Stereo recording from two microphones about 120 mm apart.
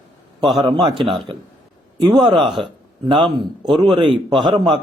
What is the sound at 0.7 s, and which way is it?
A man's voice, 45° right (ahead or behind).